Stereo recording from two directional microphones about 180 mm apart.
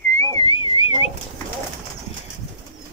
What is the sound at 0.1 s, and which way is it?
Whistling, 20° left (ahead or behind).